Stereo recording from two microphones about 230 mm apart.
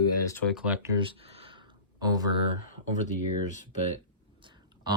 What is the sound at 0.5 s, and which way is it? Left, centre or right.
Speech, centre.